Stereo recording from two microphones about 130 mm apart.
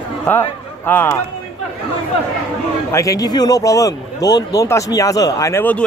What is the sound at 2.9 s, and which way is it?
Speech, 25° left (ahead or behind).